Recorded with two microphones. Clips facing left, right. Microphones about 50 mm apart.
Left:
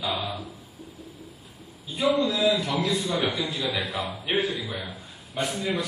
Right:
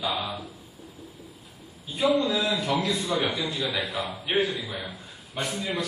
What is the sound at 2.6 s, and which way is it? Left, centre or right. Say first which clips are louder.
Speech: even; centre.